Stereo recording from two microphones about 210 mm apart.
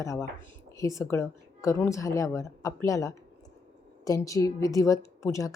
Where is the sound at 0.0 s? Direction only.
15° left (ahead or behind).